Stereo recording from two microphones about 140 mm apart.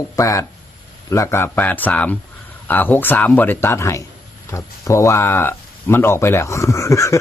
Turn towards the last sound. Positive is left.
turn(degrees=20)  # may be behind; listen again after turning